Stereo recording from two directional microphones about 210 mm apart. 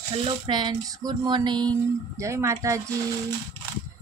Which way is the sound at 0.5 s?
20° right (ahead or behind).